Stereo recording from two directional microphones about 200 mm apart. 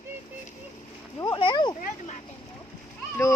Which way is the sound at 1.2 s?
20° left (ahead or behind).